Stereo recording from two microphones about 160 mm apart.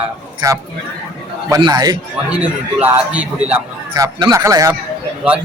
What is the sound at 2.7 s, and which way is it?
Speech, 10° right (ahead or behind).